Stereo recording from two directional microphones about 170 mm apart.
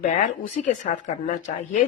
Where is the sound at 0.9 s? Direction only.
45° left (ahead or behind).